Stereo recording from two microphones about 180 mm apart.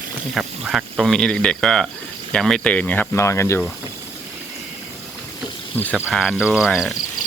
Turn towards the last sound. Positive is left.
turn(degrees=0)  # may be behind; listen again after turning